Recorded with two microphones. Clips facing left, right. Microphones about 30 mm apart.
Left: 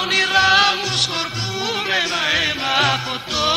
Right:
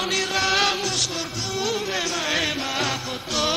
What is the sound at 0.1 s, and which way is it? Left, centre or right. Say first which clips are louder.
Music: left 9 dB; left.